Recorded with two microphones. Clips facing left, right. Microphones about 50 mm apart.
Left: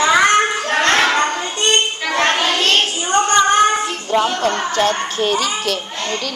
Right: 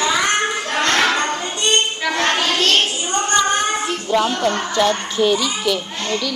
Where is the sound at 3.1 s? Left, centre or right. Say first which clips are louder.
Left 7 dB; left.